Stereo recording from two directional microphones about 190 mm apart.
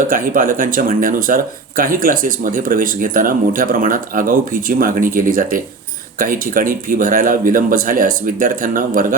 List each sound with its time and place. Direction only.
0.1 s speech: 45° right (ahead or behind)